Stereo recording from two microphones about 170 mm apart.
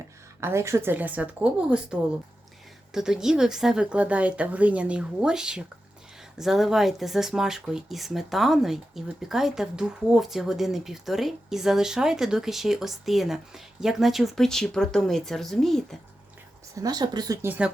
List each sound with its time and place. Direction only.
0.3 s a woman's voice: 15° right (ahead or behind); by 16.0 s centre (ahead or behind)
16.8 s speech: 25° right (ahead or behind)